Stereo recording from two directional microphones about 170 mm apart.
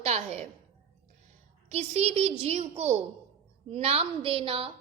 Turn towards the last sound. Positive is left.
turn(degrees=-35)  # may be behind; listen again after turning